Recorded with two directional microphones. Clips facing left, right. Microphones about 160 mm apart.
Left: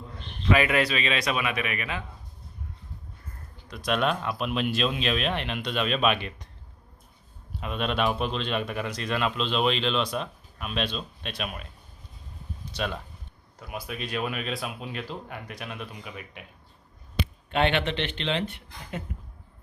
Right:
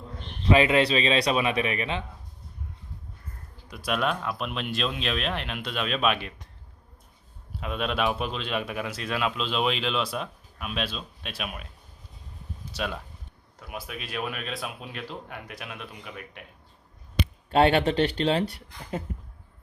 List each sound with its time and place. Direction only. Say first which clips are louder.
0.4 s speech: right 3 dB; 25° right (ahead or behind)
3.7 s speech: left 1 dB; 5° right (ahead or behind)
7.6 s speech: even; centre (ahead or behind)
12.7 s speech: left 1 dB; 5° right (ahead or behind)
17.5 s speech: right 5 dB; 35° right (ahead or behind)